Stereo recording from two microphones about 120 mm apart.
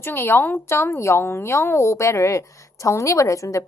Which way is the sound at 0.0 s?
20° left (ahead or behind).